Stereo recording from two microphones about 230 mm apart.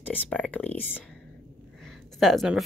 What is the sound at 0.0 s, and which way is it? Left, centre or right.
Speech, centre.